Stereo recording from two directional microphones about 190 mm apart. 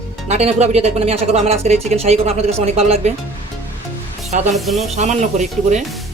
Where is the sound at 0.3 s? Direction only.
35° right (ahead or behind).